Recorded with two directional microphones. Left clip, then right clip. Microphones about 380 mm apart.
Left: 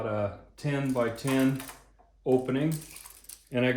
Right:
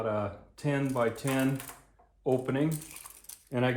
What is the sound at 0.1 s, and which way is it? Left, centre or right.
Speech, centre.